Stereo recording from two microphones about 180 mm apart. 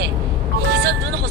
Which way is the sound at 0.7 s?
60° right (ahead or behind).